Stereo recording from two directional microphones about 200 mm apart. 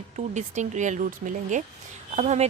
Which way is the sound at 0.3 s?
35° right (ahead or behind).